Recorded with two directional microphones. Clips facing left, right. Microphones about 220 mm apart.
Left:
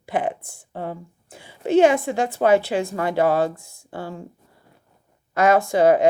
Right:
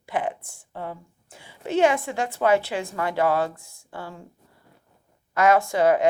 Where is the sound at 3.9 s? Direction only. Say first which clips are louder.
Left 5 dB; 25° left (ahead or behind).